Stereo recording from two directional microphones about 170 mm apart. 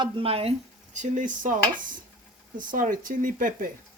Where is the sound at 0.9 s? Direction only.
45° right (ahead or behind).